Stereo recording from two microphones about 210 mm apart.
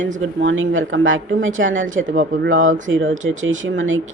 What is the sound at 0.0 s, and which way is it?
A woman's voice, 65° right (ahead or behind).